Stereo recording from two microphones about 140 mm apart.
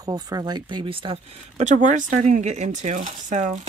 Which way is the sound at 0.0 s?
25° right (ahead or behind).